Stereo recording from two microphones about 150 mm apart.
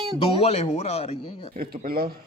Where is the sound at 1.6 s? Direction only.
85° right.